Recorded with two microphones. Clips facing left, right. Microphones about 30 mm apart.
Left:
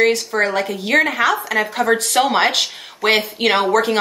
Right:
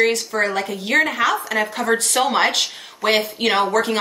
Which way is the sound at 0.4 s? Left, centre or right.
Centre.